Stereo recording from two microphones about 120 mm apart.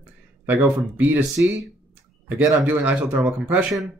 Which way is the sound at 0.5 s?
15° right (ahead or behind).